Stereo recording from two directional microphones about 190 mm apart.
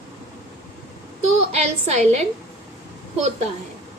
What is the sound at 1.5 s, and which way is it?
Speech, 35° right (ahead or behind).